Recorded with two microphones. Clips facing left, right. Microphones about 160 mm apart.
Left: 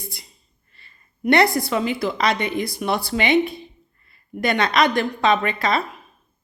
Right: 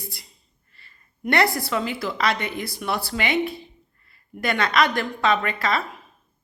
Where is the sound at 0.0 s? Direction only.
20° left (ahead or behind).